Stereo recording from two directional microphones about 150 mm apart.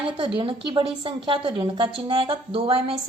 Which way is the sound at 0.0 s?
35° right (ahead or behind).